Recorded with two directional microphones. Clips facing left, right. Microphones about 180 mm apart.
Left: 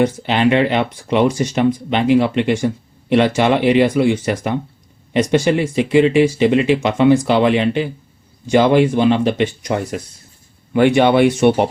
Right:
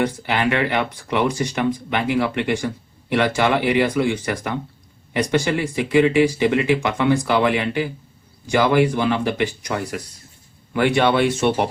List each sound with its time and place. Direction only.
0.2 s speech: 20° left (ahead or behind)